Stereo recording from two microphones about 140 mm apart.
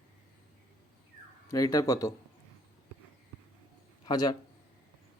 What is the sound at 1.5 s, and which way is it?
Speech, 25° left (ahead or behind).